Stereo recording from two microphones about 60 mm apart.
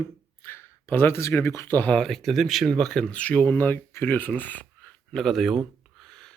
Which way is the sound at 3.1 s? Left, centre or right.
Left.